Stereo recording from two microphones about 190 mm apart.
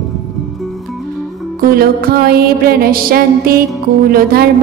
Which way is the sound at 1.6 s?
50° right (ahead or behind).